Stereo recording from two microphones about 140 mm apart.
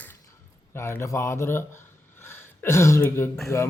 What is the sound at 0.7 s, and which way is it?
A man's voice, 20° left (ahead or behind).